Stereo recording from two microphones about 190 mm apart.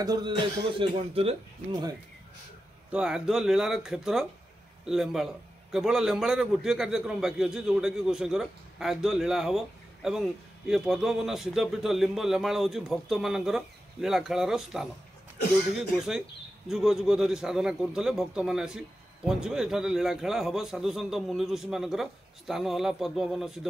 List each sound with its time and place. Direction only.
0.0 s speech: 20° right (ahead or behind)
0.7 s speech: 30° right (ahead or behind)
2.9 s a man's voice: 5° right (ahead or behind)